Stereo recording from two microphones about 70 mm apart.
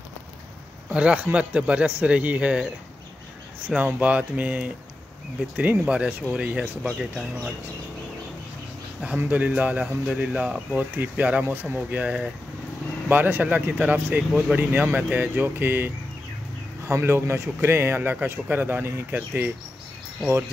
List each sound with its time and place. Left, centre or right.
0.8 s a man's voice: centre
3.6 s a man's voice: right
6.9 s speech: centre
9.0 s a man's voice: right